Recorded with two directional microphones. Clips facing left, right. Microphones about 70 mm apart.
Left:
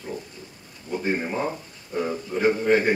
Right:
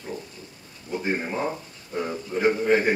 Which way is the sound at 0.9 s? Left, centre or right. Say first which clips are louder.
Left 1 dB; centre.